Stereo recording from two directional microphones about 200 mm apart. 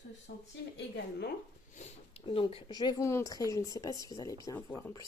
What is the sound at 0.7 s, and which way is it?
Speech, 55° left (ahead or behind).